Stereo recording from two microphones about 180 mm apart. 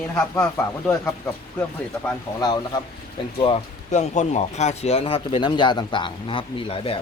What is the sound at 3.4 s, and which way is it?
Speech, 35° left (ahead or behind).